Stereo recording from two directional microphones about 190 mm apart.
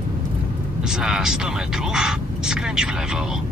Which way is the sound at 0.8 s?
5° right (ahead or behind).